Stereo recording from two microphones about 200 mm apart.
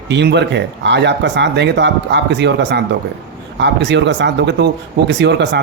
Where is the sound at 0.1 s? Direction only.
60° right (ahead or behind).